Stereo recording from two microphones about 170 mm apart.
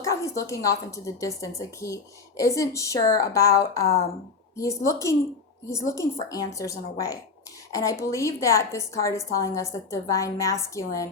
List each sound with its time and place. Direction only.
0.0 s a woman's voice: 20° left (ahead or behind)